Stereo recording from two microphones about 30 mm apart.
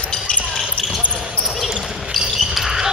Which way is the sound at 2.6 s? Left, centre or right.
Centre.